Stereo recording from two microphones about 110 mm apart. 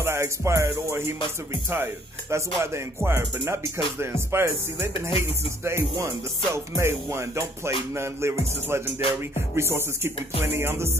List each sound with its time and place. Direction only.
0.0 s music: 25° right (ahead or behind)
2.3 s music: 25° right (ahead or behind)